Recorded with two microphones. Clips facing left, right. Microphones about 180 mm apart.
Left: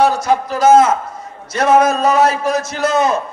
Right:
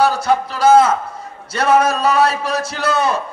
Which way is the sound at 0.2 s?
30° right (ahead or behind).